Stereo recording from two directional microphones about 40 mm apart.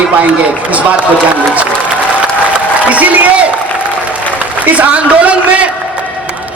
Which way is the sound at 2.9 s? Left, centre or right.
Right.